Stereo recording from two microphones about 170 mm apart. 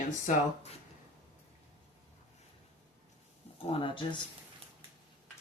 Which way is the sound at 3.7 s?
30° left (ahead or behind).